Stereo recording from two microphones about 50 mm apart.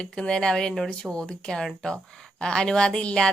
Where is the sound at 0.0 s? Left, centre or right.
Centre.